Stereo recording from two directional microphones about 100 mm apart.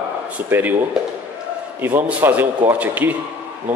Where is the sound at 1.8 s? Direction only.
20° right (ahead or behind).